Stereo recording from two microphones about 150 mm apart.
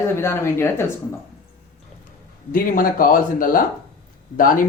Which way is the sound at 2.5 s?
65° left (ahead or behind).